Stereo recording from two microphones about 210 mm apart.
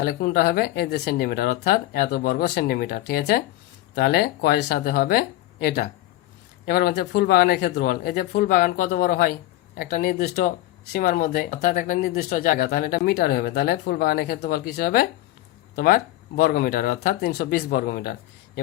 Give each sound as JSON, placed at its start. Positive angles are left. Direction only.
{"t": 0.0, "sound": "speech", "side_deg": 45}